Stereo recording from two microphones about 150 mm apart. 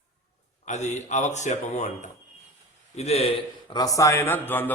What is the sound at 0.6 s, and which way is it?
A man's voice, 50° left (ahead or behind).